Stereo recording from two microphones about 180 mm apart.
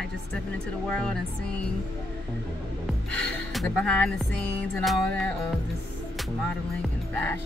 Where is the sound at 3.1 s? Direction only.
5° left (ahead or behind).